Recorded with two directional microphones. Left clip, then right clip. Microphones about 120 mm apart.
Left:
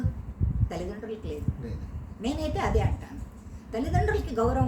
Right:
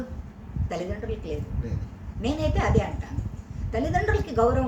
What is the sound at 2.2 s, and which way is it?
Speech, 20° left (ahead or behind).